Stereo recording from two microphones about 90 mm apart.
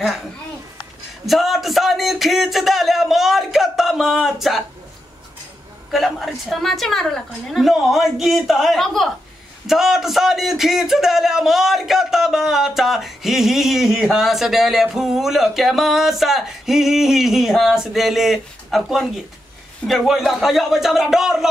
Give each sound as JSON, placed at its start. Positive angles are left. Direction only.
{"t": 1.2, "sound": "speech", "side_deg": 0}
{"t": 5.9, "sound": "speech", "side_deg": 0}